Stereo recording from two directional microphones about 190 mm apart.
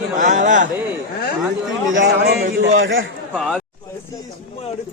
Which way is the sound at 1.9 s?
75° right (ahead or behind).